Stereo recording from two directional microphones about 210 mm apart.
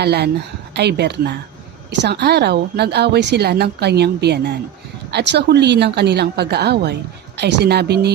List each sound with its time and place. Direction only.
0.0 s a woman's voice: 50° right (ahead or behind)